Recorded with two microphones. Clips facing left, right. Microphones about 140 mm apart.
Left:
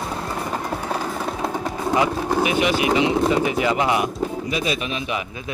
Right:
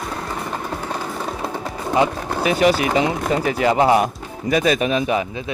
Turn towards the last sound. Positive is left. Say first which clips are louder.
# right 7 dB
turn(degrees=-40)  # may be behind; listen again after turning